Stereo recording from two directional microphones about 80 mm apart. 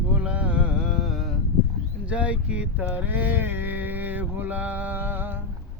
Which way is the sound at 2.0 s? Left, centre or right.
Centre.